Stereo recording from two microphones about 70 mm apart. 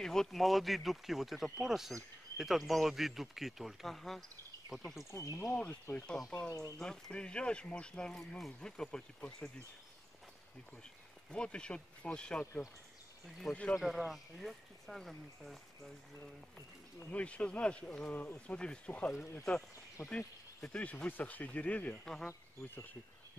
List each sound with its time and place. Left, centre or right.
0.0 s speech: centre
5.1 s speech: left
5.7 s speech: left
6.8 s speech: centre
10.8 s speech: centre
13.7 s speech: centre
17.1 s speech: centre
22.0 s speech: centre